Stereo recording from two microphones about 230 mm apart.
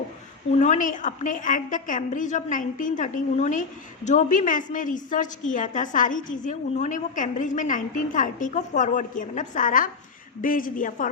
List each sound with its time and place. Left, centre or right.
0.6 s a woman's voice: left